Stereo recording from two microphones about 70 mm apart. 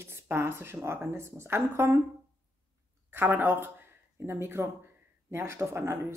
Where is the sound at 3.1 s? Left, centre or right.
Right.